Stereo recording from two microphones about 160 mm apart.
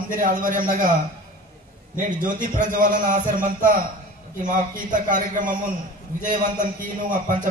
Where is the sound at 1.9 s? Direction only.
55° right (ahead or behind).